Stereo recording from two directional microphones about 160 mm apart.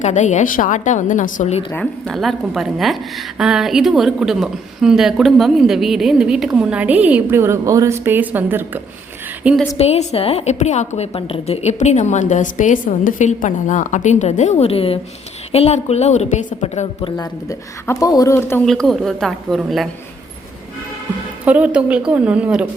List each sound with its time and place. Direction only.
0.0 s a woman's voice: 50° left (ahead or behind)
1.7 s a woman's voice: 5° left (ahead or behind)
9.7 s a woman's voice: 40° left (ahead or behind)
17.0 s speech: 20° left (ahead or behind)
18.6 s a woman's voice: 5° left (ahead or behind)
21.4 s a woman's voice: 10° right (ahead or behind)